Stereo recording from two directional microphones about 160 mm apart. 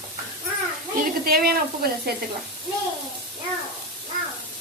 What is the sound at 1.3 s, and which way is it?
Sizzle, 75° right (ahead or behind).